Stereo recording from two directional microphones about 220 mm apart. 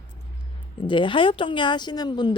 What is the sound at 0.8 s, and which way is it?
Speech, 20° left (ahead or behind).